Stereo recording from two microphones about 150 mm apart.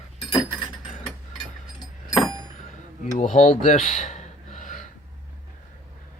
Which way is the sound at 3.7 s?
50° left (ahead or behind).